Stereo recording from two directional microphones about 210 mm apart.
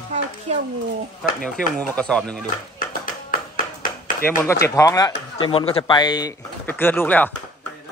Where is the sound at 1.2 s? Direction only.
Centre (ahead or behind).